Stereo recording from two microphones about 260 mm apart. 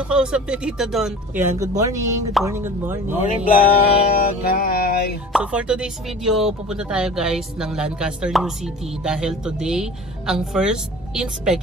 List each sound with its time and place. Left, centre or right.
0.1 s speech: centre
3.2 s music: left
5.3 s speech: centre